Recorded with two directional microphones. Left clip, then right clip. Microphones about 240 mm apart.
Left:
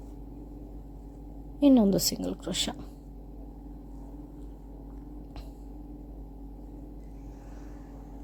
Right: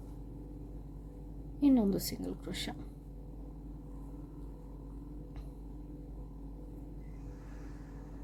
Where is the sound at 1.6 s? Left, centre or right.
Left.